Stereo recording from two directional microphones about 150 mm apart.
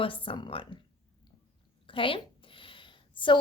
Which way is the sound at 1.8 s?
35° left (ahead or behind).